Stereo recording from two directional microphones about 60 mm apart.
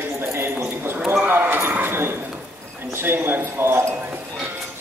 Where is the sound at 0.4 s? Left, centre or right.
Right.